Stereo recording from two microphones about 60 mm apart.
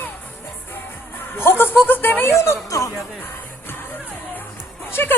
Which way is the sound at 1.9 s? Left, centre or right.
Left.